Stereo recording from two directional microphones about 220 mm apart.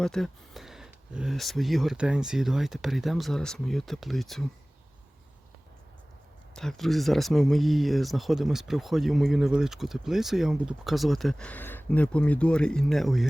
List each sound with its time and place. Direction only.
0.0 s speech: centre (ahead or behind)
6.6 s speech: centre (ahead or behind)